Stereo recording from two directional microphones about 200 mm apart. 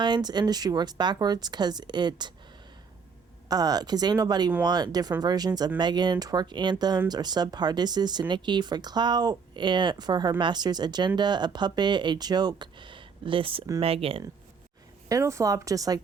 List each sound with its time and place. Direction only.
0.0 s speech: 20° right (ahead or behind)
3.5 s speech: 20° right (ahead or behind)
15.1 s a woman's voice: 15° right (ahead or behind)